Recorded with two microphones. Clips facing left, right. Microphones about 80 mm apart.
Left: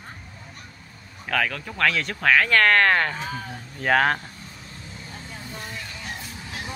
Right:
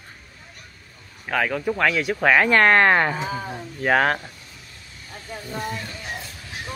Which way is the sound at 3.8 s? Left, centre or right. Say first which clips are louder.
Right 1 dB; centre.